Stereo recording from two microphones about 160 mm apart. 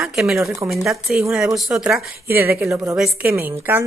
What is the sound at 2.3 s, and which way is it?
A woman's voice, 15° right (ahead or behind).